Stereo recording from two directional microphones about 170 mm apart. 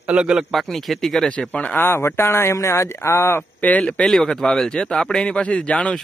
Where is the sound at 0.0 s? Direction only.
5° right (ahead or behind).